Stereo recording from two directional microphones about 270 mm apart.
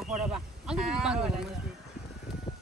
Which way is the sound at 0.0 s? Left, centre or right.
Centre.